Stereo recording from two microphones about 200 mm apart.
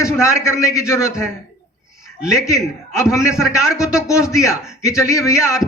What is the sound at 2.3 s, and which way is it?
A man's voice, 15° left (ahead or behind).